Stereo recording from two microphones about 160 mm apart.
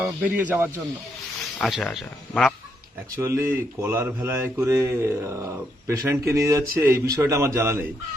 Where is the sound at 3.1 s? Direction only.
15° right (ahead or behind).